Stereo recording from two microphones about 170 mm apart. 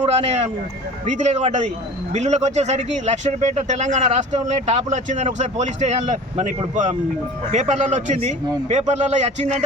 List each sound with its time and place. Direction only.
0.0 s speech: 40° right (ahead or behind)